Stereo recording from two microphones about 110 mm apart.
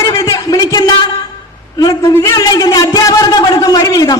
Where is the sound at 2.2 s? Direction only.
35° left (ahead or behind).